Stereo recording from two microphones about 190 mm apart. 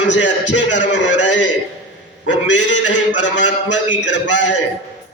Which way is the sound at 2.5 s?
70° left (ahead or behind).